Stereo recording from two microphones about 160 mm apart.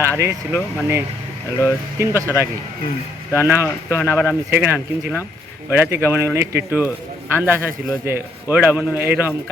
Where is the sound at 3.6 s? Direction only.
15° left (ahead or behind).